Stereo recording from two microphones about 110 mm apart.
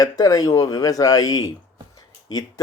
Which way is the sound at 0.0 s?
35° left (ahead or behind).